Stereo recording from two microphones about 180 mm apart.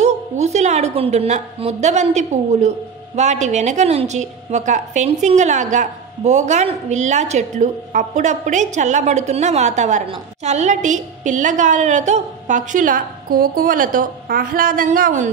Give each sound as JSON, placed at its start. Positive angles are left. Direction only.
{"t": 0.0, "sound": "a woman's voice", "side_deg": -40}